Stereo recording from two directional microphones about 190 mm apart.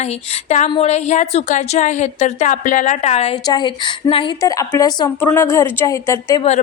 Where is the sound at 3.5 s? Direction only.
25° left (ahead or behind).